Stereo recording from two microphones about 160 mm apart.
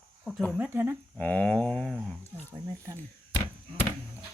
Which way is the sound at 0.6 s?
15° right (ahead or behind).